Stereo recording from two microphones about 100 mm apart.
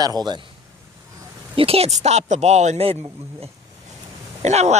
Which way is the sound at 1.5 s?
75° right (ahead or behind).